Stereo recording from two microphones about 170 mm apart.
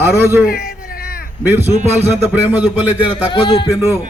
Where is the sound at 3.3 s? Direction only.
25° left (ahead or behind).